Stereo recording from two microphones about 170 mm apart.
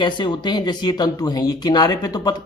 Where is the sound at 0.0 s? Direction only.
25° left (ahead or behind).